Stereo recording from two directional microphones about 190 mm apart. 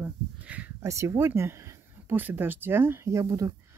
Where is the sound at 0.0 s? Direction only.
10° right (ahead or behind).